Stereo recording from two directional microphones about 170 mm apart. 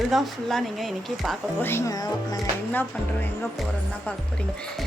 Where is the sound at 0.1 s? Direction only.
Centre (ahead or behind).